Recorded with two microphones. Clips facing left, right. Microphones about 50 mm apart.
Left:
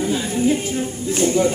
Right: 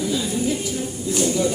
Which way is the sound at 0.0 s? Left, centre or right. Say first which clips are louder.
Left 3 dB; left.